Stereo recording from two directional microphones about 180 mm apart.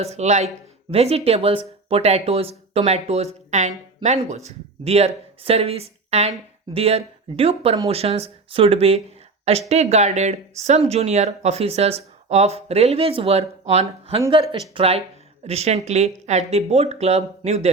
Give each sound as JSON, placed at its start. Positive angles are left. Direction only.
{"t": 0.0, "sound": "speech", "side_deg": -35}